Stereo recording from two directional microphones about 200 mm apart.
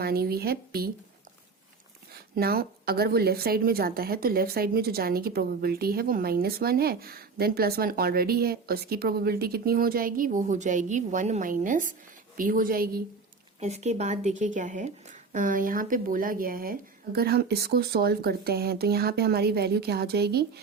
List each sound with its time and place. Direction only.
0.0 s a woman's voice: 50° right (ahead or behind)
2.3 s a woman's voice: 50° right (ahead or behind)
13.6 s a woman's voice: 35° right (ahead or behind); by 20.4 s 55° right (ahead or behind)